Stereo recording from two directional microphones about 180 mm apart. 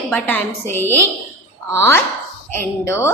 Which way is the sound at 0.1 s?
10° left (ahead or behind).